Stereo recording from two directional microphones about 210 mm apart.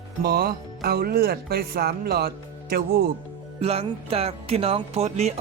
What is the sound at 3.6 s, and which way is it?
Music, 30° right (ahead or behind).